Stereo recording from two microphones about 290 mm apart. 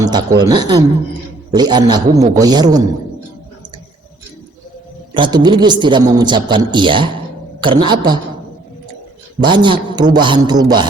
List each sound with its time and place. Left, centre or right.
0.0 s a man's voice: centre
5.1 s a man's voice: centre
9.4 s a man's voice: centre